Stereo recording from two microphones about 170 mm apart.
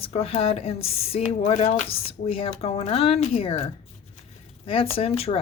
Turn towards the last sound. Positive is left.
turn(degrees=35)  # may be behind; listen again after turning